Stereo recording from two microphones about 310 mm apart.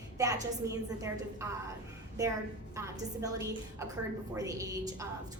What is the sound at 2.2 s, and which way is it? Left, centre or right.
A woman's voice, centre.